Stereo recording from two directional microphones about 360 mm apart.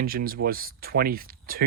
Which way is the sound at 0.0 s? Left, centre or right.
Right.